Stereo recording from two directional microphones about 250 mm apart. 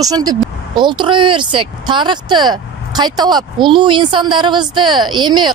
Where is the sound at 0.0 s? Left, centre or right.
Centre.